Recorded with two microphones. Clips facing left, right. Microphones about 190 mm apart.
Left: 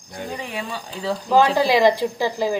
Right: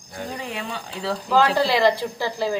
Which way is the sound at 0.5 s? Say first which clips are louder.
Left 1 dB; 5° left (ahead or behind).